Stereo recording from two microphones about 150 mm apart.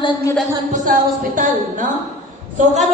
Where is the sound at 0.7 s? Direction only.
65° right (ahead or behind).